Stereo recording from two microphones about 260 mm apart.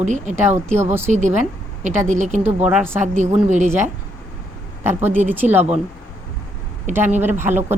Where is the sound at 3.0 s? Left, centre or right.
Right.